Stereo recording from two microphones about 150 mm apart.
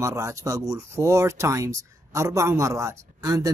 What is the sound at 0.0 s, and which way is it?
Speech, 20° right (ahead or behind).